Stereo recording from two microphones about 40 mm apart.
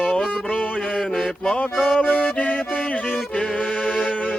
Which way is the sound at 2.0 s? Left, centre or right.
Left.